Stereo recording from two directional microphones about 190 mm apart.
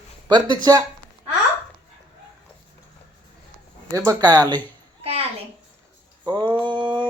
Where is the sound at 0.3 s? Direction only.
25° right (ahead or behind).